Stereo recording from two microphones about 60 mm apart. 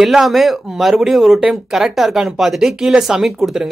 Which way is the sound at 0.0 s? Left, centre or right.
Centre.